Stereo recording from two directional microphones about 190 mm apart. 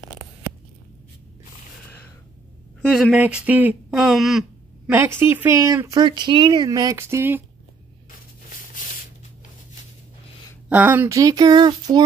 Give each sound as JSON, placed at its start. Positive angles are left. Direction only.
{"t": 2.8, "sound": "speech", "side_deg": 0}
{"t": 4.9, "sound": "speech", "side_deg": -15}
{"t": 10.7, "sound": "speech", "side_deg": -10}